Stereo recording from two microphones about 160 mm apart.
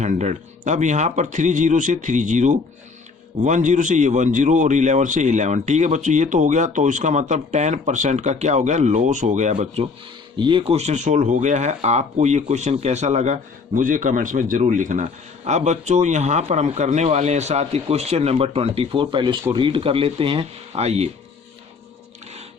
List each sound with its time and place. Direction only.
0.0 s speech: 45° right (ahead or behind)
10.3 s speech: 30° right (ahead or behind)